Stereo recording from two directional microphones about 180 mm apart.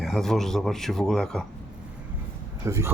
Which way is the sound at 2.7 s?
15° right (ahead or behind).